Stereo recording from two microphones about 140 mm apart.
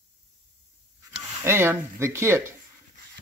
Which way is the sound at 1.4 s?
15° right (ahead or behind).